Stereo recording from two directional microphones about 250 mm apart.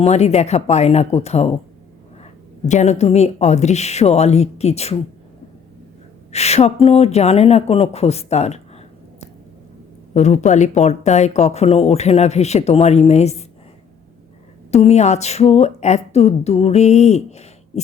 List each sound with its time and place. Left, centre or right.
0.0 s speech: left
2.6 s speech: left
6.3 s speech: left
10.2 s speech: left
14.7 s speech: left